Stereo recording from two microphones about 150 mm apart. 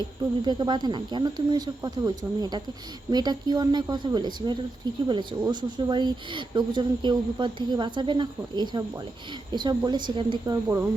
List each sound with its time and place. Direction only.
0.4 s speech: 30° right (ahead or behind)